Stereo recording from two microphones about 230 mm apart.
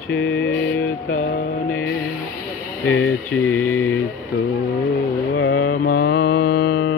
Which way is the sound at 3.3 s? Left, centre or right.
Centre.